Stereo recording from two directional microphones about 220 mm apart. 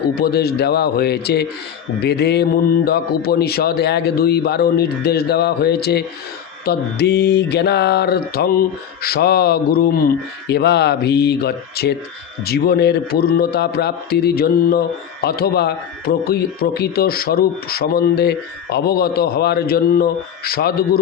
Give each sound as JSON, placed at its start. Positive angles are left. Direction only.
{"t": 0.2, "sound": "a man's voice", "side_deg": 45}